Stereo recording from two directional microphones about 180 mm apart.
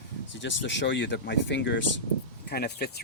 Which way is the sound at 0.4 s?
90° left.